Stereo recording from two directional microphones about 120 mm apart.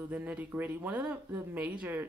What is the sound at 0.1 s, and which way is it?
Speech, 15° right (ahead or behind).